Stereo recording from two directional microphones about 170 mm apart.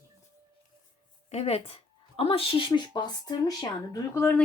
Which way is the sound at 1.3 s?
35° left (ahead or behind).